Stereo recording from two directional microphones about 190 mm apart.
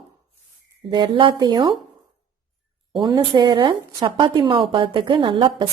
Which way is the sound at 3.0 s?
20° right (ahead or behind).